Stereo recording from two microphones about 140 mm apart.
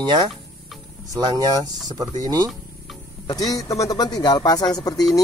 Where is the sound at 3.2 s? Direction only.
25° left (ahead or behind).